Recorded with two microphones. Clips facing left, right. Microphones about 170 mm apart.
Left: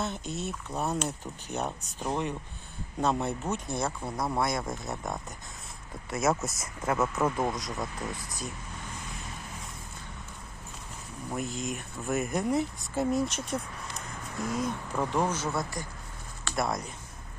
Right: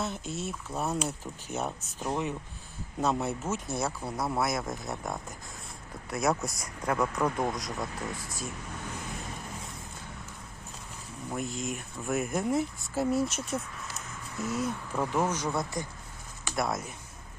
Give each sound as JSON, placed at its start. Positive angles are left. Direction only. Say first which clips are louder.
{"t": 0.0, "sound": "speech", "louder": "left 1 dB", "side_deg": 0}
{"t": 11.3, "sound": "speech", "louder": "even", "side_deg": 0}
{"t": 15.8, "sound": "speech", "louder": "right 3 dB", "side_deg": -20}
{"t": 16.6, "sound": "speech", "louder": "even", "side_deg": 0}